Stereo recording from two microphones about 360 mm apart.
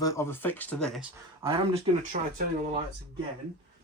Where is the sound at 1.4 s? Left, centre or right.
Centre.